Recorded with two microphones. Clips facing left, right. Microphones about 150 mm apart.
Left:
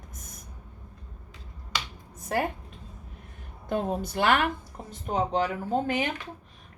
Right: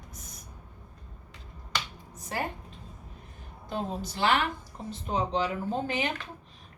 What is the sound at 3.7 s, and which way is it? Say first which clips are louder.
Speech: left 5 dB; 55° left (ahead or behind).